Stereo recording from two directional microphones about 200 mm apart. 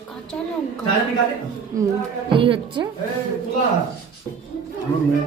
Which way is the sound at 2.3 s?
25° right (ahead or behind).